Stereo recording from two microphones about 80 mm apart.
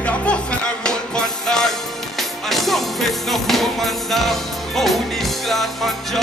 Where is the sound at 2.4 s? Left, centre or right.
Centre.